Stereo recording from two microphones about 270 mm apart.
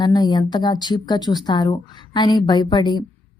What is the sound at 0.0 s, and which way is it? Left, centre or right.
A woman's voice, centre.